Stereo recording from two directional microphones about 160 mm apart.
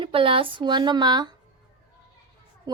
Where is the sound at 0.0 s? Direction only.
35° right (ahead or behind).